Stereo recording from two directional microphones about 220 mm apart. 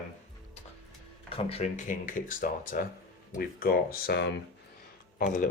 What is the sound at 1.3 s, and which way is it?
Speech, 25° left (ahead or behind).